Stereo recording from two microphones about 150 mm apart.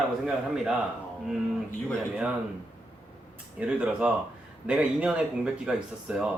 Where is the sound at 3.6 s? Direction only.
10° right (ahead or behind).